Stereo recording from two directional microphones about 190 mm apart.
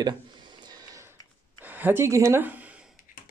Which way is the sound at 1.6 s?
10° right (ahead or behind).